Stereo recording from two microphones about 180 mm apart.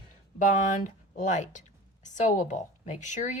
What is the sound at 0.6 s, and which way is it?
A woman's voice, 45° left (ahead or behind).